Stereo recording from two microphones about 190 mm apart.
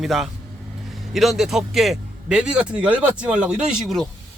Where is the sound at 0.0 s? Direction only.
Centre (ahead or behind).